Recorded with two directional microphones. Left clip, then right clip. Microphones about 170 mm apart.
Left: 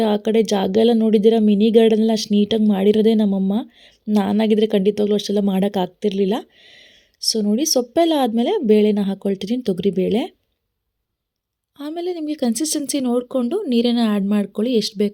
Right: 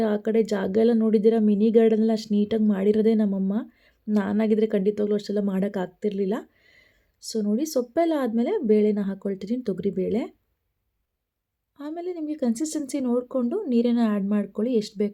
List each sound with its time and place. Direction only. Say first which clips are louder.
0.0 s speech: left 5 dB; 25° left (ahead or behind)
11.8 s speech: left 6 dB; 30° left (ahead or behind)